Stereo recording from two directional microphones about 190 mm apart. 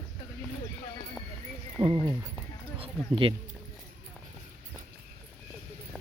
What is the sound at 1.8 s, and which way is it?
Horse, 25° right (ahead or behind).